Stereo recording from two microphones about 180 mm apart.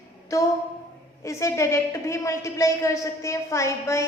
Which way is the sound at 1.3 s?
15° left (ahead or behind).